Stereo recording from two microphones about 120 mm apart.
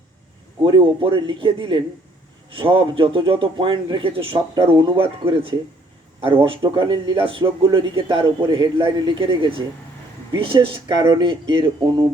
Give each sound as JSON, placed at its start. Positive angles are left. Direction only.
{"t": 0.6, "sound": "speech", "side_deg": -45}